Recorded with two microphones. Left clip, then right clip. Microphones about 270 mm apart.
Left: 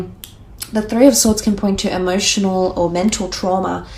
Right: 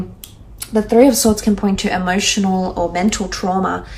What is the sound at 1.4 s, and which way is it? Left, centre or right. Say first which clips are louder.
A woman's voice: even; left.